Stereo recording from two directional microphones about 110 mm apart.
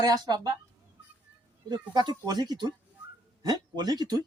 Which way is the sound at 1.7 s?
40° right (ahead or behind).